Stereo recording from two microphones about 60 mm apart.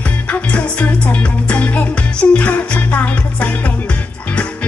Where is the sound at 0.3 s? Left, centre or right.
Left.